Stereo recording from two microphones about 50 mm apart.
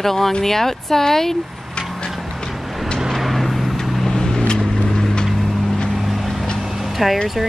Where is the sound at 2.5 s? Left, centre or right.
Centre.